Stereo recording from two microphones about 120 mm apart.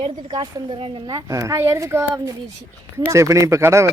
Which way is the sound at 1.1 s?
25° right (ahead or behind).